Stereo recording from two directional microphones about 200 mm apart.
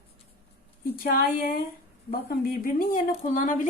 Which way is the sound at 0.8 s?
45° left (ahead or behind).